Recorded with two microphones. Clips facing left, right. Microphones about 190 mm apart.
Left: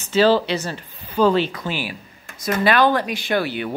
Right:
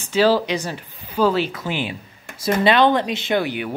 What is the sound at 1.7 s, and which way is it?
Speech, 20° right (ahead or behind).